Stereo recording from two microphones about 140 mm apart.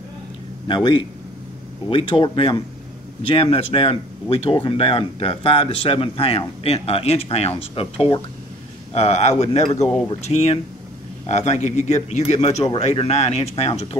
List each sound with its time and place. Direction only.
0.7 s speech: 35° left (ahead or behind)